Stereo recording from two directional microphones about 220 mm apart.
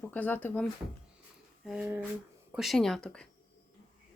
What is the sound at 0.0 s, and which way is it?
Speech, 10° left (ahead or behind).